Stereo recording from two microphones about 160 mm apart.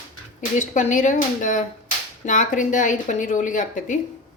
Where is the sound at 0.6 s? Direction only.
50° left (ahead or behind).